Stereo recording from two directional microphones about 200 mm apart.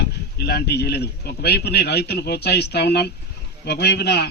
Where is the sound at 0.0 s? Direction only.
55° left (ahead or behind).